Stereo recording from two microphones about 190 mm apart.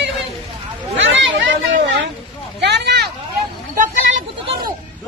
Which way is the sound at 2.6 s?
65° right (ahead or behind).